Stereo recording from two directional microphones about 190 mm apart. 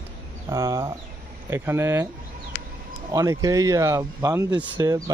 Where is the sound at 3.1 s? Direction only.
20° right (ahead or behind).